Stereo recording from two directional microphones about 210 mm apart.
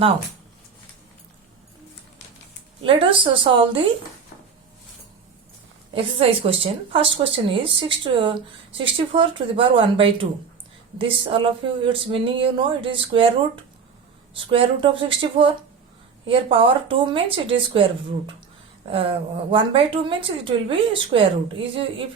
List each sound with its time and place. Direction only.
2.8 s a woman's voice: 25° right (ahead or behind)
5.9 s a woman's voice: 25° right (ahead or behind)
14.3 s a woman's voice: 25° right (ahead or behind)
18.9 s a woman's voice: 25° right (ahead or behind)